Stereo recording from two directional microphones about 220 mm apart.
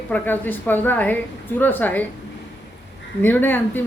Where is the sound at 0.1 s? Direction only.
10° left (ahead or behind).